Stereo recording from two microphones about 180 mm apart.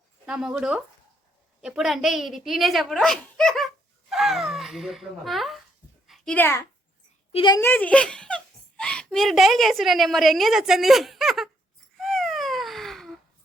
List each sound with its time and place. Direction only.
0.3 s a child's voice: 5° right (ahead or behind); by 6.7 s 10° left (ahead or behind)
7.3 s a woman's voice: 25° left (ahead or behind)
7.6 s speech: 10° left (ahead or behind)
11.9 s a sound: centre (ahead or behind)